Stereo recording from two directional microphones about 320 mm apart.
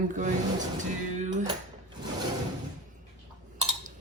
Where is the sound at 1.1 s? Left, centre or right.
Right.